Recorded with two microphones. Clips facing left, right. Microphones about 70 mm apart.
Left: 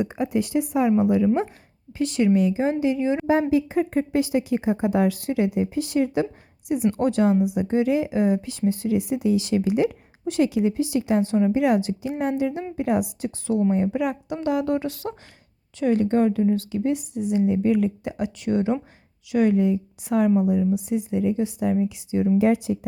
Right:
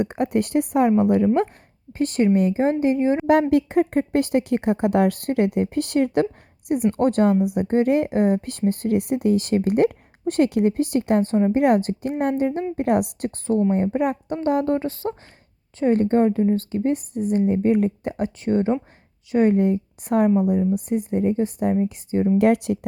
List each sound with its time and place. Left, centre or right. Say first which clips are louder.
0.0 s a woman's voice: right 2 dB; right
3.5 s speech: right 3 dB; right
11.5 s a woman's voice: right 2 dB; right
13.7 s a woman's voice: right 2 dB; right
22.4 s speech: right 3 dB; right